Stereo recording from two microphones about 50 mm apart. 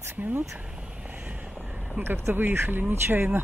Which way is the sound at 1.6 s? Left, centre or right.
Right.